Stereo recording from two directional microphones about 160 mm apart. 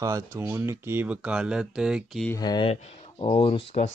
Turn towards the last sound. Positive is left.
turn(degrees=35)  # may be behind; listen again after turning